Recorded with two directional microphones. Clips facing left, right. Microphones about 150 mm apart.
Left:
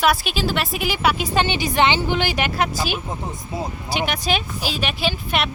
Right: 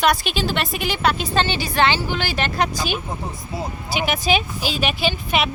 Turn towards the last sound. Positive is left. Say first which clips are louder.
# right 1 dB
turn(degrees=0)  # may be behind; listen again after turning